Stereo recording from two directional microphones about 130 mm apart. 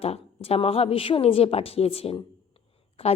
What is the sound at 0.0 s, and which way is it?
A woman's voice, 50° left (ahead or behind).